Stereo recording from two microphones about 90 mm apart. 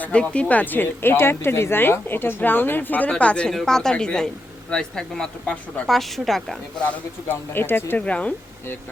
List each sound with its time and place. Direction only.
0.0 s speech: 10° left (ahead or behind)
7.3 s speech: 25° left (ahead or behind)